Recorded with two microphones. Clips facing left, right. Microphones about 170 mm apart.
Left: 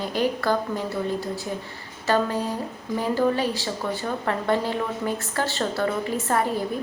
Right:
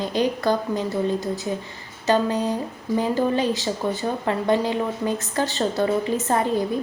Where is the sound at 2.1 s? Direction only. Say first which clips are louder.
Right 3 dB; 20° right (ahead or behind).